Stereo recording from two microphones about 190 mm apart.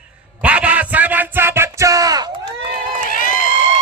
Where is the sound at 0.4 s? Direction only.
5° right (ahead or behind).